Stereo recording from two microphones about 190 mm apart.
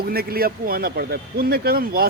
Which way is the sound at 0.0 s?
55° right (ahead or behind).